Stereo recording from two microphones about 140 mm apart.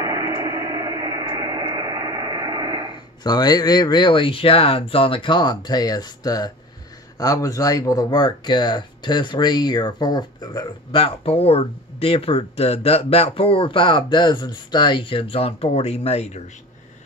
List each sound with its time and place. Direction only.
0.0 s radio: 20° right (ahead or behind)
3.3 s speech: 30° left (ahead or behind); by 16.4 s 50° left (ahead or behind)